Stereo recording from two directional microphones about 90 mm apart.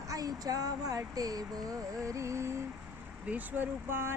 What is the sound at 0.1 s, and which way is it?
Speech, 45° right (ahead or behind).